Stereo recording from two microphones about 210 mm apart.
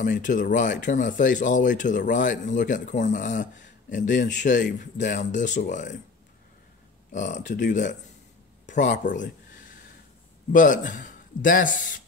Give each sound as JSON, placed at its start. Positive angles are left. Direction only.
{"t": 0.0, "sound": "speech", "side_deg": 40}
{"t": 7.1, "sound": "speech", "side_deg": 35}
{"t": 10.5, "sound": "speech", "side_deg": 40}